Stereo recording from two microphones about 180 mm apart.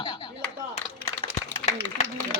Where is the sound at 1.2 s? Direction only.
40° left (ahead or behind).